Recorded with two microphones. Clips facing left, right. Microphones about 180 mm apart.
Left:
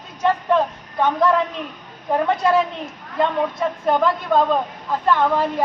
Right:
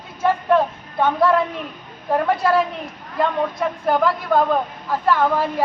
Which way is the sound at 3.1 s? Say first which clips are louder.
Even; centre (ahead or behind).